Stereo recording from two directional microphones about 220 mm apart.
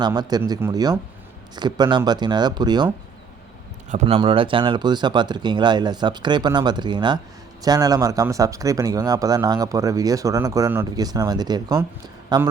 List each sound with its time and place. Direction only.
0.0 s speech: 20° right (ahead or behind)
3.8 s speech: 30° right (ahead or behind)